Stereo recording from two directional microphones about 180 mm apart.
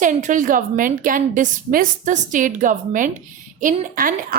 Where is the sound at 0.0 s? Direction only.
45° right (ahead or behind).